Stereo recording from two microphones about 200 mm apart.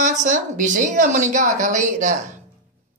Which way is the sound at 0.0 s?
35° right (ahead or behind).